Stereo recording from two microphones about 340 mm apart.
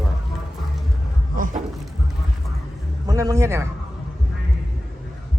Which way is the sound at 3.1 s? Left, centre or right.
Centre.